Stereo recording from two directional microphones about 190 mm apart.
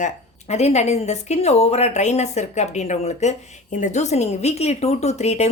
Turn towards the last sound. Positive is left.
turn(degrees=35)  # may be behind; listen again after turning